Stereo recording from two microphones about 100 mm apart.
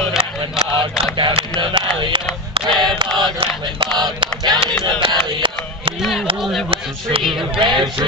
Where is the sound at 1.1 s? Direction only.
55° right (ahead or behind).